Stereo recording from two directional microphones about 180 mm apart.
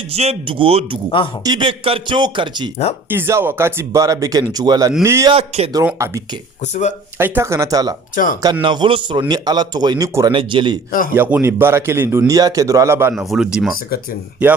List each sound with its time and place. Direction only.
0.1 s a man's voice: 35° right (ahead or behind)
3.1 s a man's voice: 15° right (ahead or behind)
5.3 s speech: 35° right (ahead or behind)
5.8 s speech: 15° right (ahead or behind)
8.1 s speech: 50° left (ahead or behind)
8.4 s a man's voice: 20° right (ahead or behind)
11.1 s speech: 10° right (ahead or behind)
13.1 s speech: 5° right (ahead or behind)